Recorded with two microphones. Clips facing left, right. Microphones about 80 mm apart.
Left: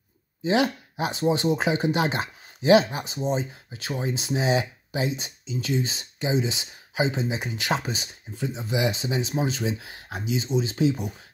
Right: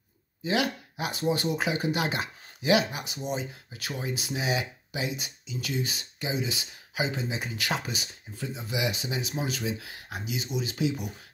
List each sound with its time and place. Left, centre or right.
0.4 s speech: left